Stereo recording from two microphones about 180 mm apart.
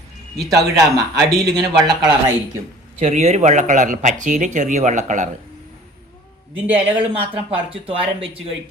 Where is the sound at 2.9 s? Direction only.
35° right (ahead or behind).